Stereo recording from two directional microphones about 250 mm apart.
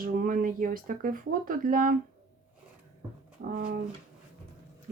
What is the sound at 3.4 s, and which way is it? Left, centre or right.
Speech, right.